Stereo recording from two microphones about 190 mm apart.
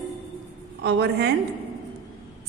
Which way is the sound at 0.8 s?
60° right (ahead or behind).